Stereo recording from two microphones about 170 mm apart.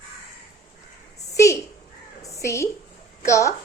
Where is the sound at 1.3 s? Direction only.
20° left (ahead or behind).